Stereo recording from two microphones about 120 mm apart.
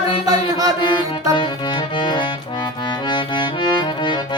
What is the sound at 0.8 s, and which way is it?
Music, 40° left (ahead or behind).